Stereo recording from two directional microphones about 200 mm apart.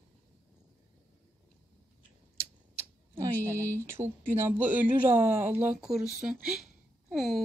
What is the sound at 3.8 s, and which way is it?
Speech, 10° right (ahead or behind).